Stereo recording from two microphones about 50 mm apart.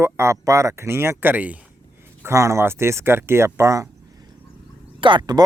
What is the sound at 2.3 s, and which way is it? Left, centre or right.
Speech, right.